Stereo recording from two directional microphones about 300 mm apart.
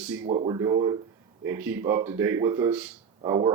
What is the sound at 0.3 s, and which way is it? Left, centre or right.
Speech, centre.